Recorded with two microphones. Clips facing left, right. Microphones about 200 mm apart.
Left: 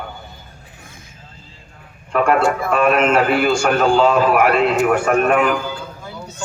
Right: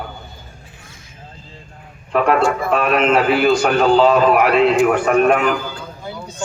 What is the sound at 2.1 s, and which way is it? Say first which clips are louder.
A man's voice: even; centre (ahead or behind).